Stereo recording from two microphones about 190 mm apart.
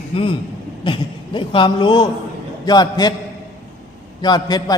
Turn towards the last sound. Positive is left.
turn(degrees=20)  # may be behind; listen again after turning